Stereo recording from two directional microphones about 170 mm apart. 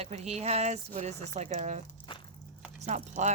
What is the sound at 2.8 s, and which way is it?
Speech, 45° right (ahead or behind).